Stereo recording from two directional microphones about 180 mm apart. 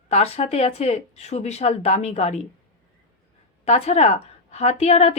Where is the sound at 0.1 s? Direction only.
35° left (ahead or behind).